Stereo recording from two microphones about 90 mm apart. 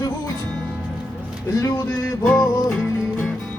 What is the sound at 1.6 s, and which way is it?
Music, 35° left (ahead or behind).